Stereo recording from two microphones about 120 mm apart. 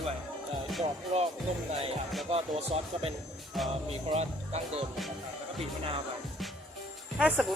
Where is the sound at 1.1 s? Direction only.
80° right.